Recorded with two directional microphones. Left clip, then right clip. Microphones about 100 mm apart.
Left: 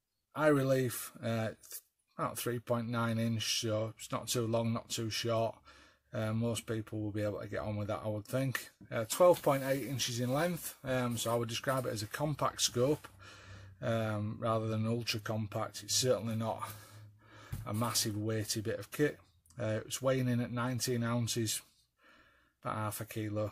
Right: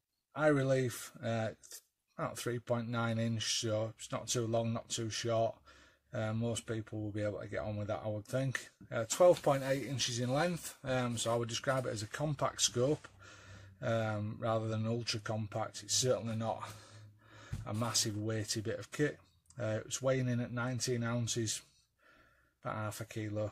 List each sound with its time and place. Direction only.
0.3 s speech: 30° left (ahead or behind)
4.1 s speech: 35° left (ahead or behind)
17.7 s speech: 30° left (ahead or behind)
22.6 s speech: 25° left (ahead or behind)